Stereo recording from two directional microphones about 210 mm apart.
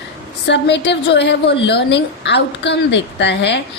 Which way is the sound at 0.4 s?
55° left (ahead or behind).